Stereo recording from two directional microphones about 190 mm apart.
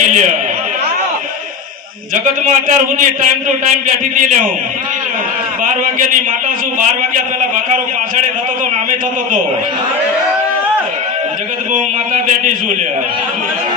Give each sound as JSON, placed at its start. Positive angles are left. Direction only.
{"t": 0.0, "sound": "a man's voice", "side_deg": -40}
{"t": 2.5, "sound": "a man's voice", "side_deg": -45}
{"t": 5.6, "sound": "a man's voice", "side_deg": -40}
{"t": 7.5, "sound": "a man's voice", "side_deg": -45}